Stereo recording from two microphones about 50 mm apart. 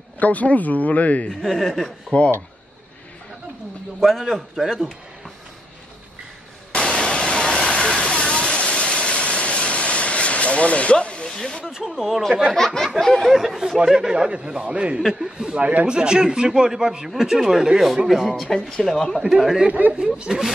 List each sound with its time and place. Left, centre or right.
0.2 s speech: left
1.3 s speech: centre
2.1 s speech: centre
4.0 s a man's voice: centre
6.7 s a sound: left
11.3 s speech: centre
11.6 s speech: centre
12.5 s a man's voice: centre
13.9 s a man's voice: centre
15.0 s speech: centre
15.6 s a man's voice: right; by 19.2 s centre
19.8 s speech: right
20.2 s speech: centre